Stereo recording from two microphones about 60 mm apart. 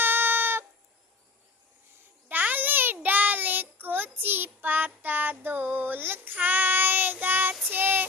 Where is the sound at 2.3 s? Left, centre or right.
Right.